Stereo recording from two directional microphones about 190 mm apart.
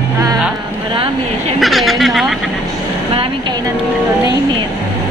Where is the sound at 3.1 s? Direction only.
25° right (ahead or behind).